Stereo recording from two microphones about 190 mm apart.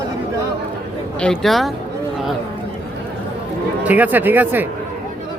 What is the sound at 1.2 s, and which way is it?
Speech, 5° left (ahead or behind).